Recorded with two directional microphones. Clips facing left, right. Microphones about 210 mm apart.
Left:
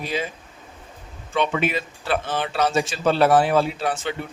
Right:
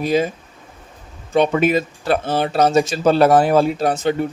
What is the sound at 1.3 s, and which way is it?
Speech, 40° right (ahead or behind).